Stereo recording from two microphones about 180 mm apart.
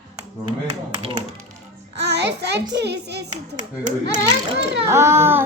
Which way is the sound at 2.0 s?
70° right (ahead or behind).